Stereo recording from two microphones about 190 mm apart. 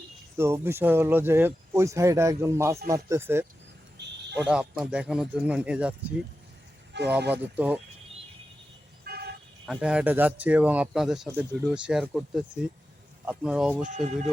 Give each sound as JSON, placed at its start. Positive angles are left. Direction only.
{"t": 0.3, "sound": "speech", "side_deg": -15}
{"t": 4.0, "sound": "a sound", "side_deg": -65}
{"t": 4.4, "sound": "speech", "side_deg": -5}
{"t": 7.5, "sound": "speech", "side_deg": -10}
{"t": 9.0, "sound": "vehicle", "side_deg": -55}
{"t": 9.6, "sound": "speech", "side_deg": -5}
{"t": 13.8, "sound": "speech", "side_deg": -40}